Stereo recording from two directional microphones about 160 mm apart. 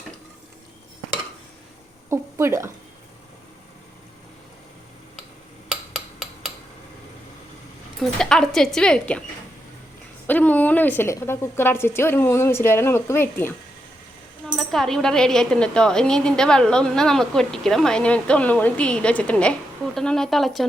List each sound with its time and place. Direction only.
2.0 s a sound: 15° right (ahead or behind)
8.0 s speech: 5° left (ahead or behind)
10.2 s a woman's voice: 10° left (ahead or behind)
14.4 s speech: 5° left (ahead or behind)